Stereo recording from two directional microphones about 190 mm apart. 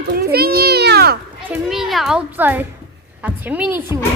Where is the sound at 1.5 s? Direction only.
Centre (ahead or behind).